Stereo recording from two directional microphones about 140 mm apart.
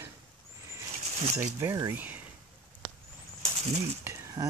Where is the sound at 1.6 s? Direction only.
25° right (ahead or behind).